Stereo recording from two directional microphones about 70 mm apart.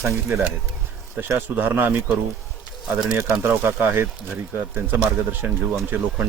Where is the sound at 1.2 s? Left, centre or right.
Right.